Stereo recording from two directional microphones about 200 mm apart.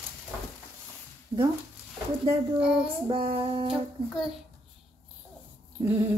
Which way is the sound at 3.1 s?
25° right (ahead or behind).